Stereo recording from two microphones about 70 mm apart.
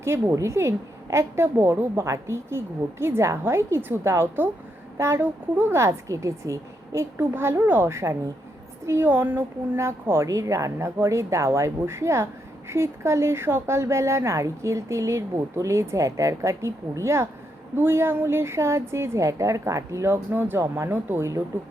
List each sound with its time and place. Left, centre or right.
0.0 s a woman's voice: right
2.0 s a woman's voice: right
7.2 s a woman's voice: right
8.9 s a woman's voice: right
10.2 s a woman's voice: right